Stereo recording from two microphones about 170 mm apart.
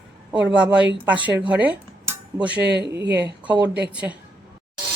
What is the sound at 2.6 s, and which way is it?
Speech, 80° right.